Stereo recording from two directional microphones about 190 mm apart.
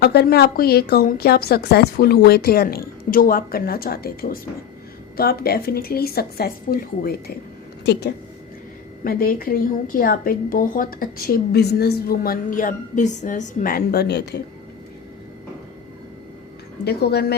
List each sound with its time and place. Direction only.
0.0 s a woman's voice: 55° left (ahead or behind)
9.0 s a woman's voice: 50° left (ahead or behind)
16.8 s speech: 60° left (ahead or behind)